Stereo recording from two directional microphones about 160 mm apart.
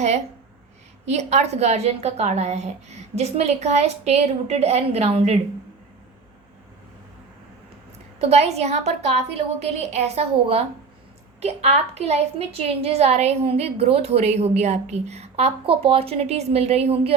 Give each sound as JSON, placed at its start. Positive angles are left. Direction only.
{"t": 1.0, "sound": "a woman's voice", "side_deg": -45}
{"t": 8.2, "sound": "a woman's voice", "side_deg": -40}